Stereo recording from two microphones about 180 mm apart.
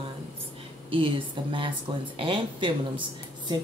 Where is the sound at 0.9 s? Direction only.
30° right (ahead or behind).